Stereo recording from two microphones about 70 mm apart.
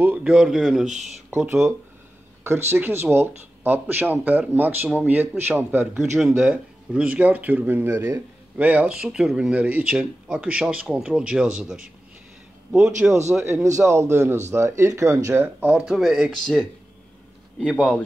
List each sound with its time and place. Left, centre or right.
0.2 s speech: centre
2.4 s a man's voice: right
6.1 s speech: centre; by 8.2 s right
8.5 s speech: right
13.1 s a man's voice: right
15.4 s speech: right
15.9 s speech: centre
17.6 s speech: centre